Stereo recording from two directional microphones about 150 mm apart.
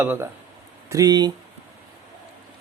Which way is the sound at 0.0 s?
15° right (ahead or behind).